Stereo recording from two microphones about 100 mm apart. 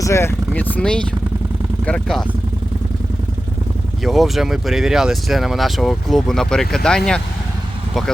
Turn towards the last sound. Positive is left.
turn(degrees=5)  # may be behind; listen again after turning